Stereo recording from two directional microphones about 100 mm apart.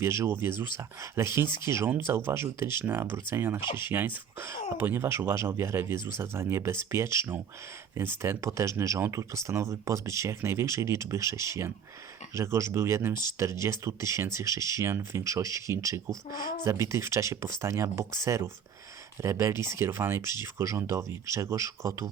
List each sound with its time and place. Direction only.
0.0 s speech: 25° right (ahead or behind)